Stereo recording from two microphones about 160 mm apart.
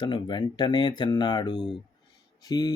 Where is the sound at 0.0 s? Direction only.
30° left (ahead or behind).